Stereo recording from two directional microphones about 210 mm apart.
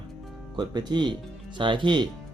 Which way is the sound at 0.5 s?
20° right (ahead or behind).